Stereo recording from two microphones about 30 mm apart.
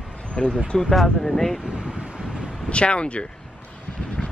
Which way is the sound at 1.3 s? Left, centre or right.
Centre.